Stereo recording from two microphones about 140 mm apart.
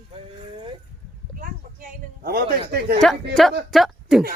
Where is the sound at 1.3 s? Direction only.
85° right.